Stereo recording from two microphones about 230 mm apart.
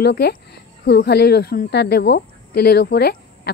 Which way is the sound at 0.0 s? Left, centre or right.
Left.